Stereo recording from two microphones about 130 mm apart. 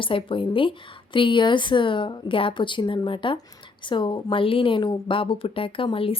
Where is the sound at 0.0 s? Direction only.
40° left (ahead or behind).